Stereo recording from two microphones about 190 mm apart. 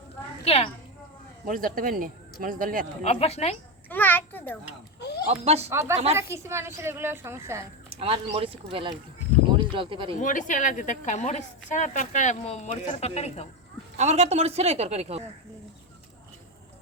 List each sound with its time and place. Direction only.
0.4 s a woman's voice: 30° left (ahead or behind)
1.5 s speech: 45° right (ahead or behind)
3.0 s a woman's voice: 35° left (ahead or behind)
3.8 s a sound: 10° left (ahead or behind)
4.9 s a sound: 60° left (ahead or behind)
5.3 s a woman's voice: 35° right (ahead or behind)
5.7 s a woman's voice: 15° right (ahead or behind)
7.9 s speech: 30° right (ahead or behind)
10.2 s a woman's voice: 40° left (ahead or behind)
14.0 s a woman's voice: 35° right (ahead or behind)